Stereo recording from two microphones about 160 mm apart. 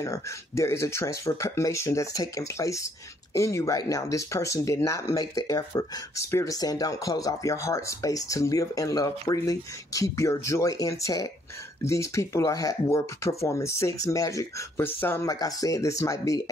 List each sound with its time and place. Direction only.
0.0 s speech: 20° left (ahead or behind)